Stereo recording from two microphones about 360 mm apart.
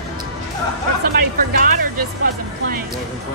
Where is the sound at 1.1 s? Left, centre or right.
Right.